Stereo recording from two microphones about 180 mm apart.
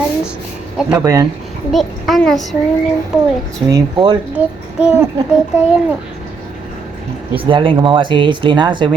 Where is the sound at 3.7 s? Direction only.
25° right (ahead or behind).